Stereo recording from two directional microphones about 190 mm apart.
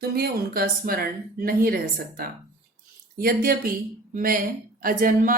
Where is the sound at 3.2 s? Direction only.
50° right (ahead or behind).